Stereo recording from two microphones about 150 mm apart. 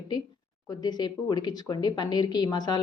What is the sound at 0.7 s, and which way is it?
Speech, 25° left (ahead or behind).